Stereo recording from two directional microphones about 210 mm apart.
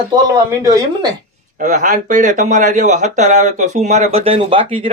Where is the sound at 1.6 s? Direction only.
35° right (ahead or behind).